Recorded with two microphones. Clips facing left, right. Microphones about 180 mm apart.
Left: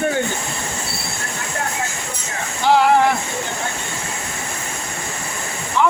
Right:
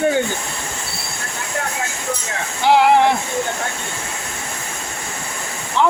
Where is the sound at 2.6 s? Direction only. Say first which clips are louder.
Right 1 dB; 15° right (ahead or behind).